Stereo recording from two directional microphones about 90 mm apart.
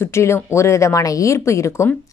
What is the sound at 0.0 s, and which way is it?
A woman's voice, 30° left (ahead or behind).